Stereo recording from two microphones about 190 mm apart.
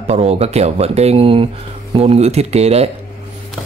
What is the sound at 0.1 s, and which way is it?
Speech, 35° right (ahead or behind).